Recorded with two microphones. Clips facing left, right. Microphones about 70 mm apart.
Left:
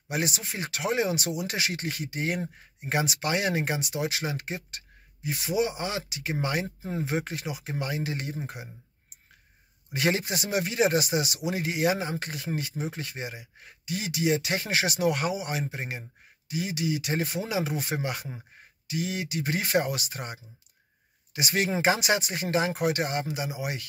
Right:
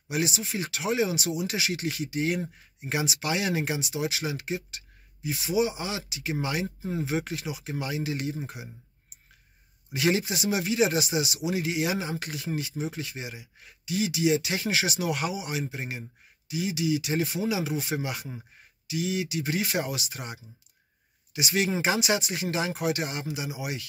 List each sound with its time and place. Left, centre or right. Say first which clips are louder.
0.1 s speech: right 1 dB; left
9.9 s speech: right 1 dB; left